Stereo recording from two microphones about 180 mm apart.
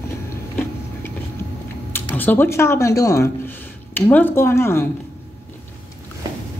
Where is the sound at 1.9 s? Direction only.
10° left (ahead or behind).